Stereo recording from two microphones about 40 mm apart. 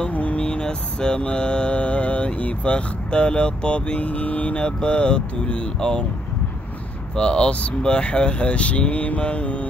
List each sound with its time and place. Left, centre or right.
0.1 s mantra: left
7.2 s mantra: left